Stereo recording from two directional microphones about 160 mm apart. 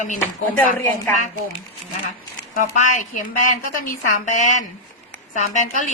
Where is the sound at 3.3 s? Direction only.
55° left (ahead or behind).